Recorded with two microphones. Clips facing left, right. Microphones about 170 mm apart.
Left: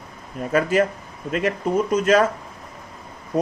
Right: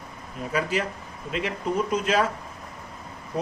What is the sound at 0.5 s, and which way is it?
A man's voice, 50° left (ahead or behind).